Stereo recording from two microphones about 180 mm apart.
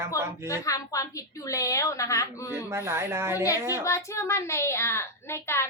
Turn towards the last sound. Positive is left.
turn(degrees=15)  # may be behind; listen again after turning